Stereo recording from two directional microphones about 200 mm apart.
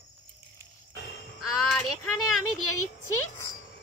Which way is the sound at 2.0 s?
90° left.